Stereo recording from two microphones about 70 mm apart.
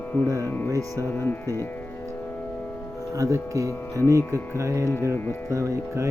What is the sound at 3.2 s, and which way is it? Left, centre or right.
Speech, right.